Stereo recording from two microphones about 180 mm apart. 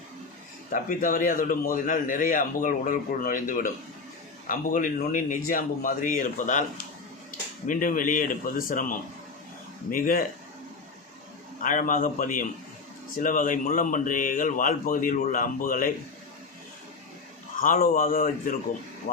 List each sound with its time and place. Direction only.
0.7 s a man's voice: 45° left (ahead or behind)
11.6 s a man's voice: 45° left (ahead or behind)
17.8 s a man's voice: 50° left (ahead or behind)